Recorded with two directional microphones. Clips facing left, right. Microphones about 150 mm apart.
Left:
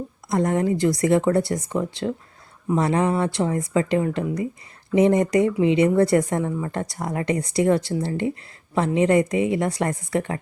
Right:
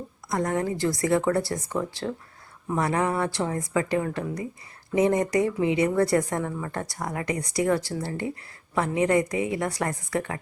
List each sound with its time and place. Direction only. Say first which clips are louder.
0.3 s a woman's voice: left 5 dB; 25° left (ahead or behind)